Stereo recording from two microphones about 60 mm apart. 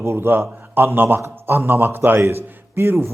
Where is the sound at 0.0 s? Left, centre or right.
Right.